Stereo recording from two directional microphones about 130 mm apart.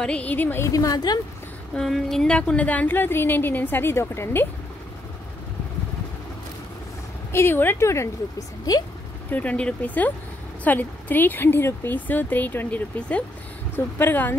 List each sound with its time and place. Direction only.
0.0 s a woman's voice: 10° left (ahead or behind); by 1.2 s 30° left (ahead or behind)
1.8 s speech: centre (ahead or behind); by 4.5 s 20° left (ahead or behind)
7.3 s a woman's voice: 15° left (ahead or behind)
9.3 s speech: 10° left (ahead or behind)